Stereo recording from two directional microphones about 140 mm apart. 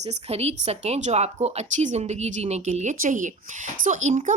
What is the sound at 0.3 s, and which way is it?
Speech, 50° right (ahead or behind).